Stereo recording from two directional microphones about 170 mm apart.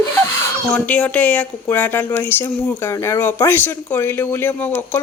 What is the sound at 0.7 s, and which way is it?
Speech, 5° left (ahead or behind).